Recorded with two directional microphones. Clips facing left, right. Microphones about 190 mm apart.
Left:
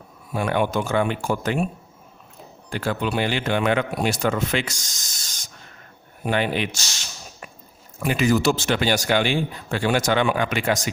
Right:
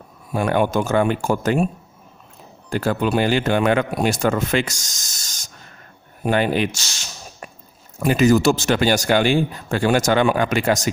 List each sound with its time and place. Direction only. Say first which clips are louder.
0.3 s speech: right 3 dB; 45° right (ahead or behind)
2.6 s speech: right 5 dB; 45° right (ahead or behind)
7.9 s speech: right 5 dB; 40° right (ahead or behind)